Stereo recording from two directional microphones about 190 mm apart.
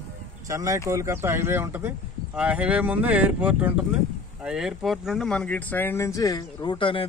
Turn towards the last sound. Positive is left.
turn(degrees=25)  # may be behind; listen again after turning